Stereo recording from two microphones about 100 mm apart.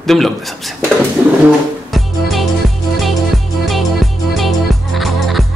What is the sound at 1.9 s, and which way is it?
Music, centre (ahead or behind).